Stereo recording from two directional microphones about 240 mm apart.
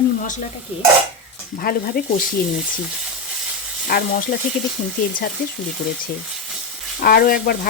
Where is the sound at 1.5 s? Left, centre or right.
Left.